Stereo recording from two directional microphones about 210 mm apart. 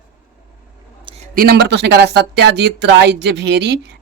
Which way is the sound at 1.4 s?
50° right (ahead or behind).